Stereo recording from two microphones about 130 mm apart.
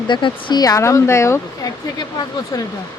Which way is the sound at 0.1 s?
40° left (ahead or behind).